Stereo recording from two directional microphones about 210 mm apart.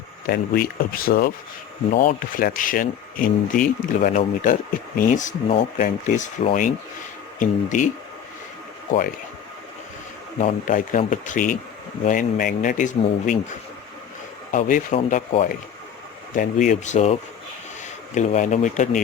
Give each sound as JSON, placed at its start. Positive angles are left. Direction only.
{"t": 0.3, "sound": "speech", "side_deg": 45}
{"t": 10.4, "sound": "speech", "side_deg": 35}
{"t": 14.5, "sound": "speech", "side_deg": 40}